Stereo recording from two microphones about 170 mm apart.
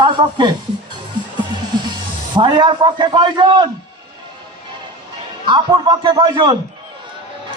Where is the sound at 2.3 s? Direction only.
25° right (ahead or behind).